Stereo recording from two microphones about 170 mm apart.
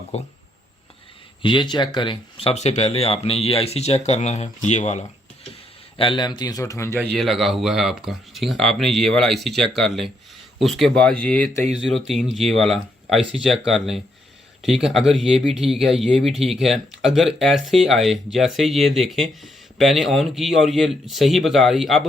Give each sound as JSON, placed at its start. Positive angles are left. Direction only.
{"t": 0.1, "sound": "speech", "side_deg": 40}
{"t": 1.4, "sound": "speech", "side_deg": 30}
{"t": 6.0, "sound": "a man's voice", "side_deg": 30}
{"t": 7.1, "sound": "speech", "side_deg": 0}